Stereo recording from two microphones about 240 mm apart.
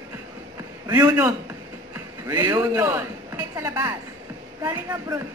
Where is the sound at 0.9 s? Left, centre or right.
Centre.